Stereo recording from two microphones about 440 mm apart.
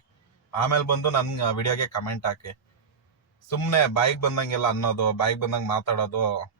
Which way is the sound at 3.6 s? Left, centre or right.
Left.